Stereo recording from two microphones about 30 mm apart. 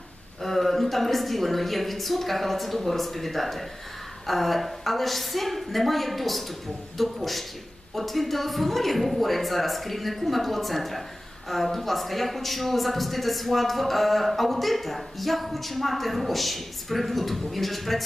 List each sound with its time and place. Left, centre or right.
0.4 s a man's voice: centre